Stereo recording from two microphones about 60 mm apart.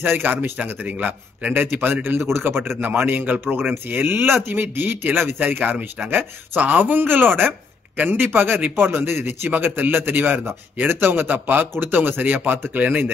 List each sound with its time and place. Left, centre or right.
0.0 s speech: right
1.5 s speech: right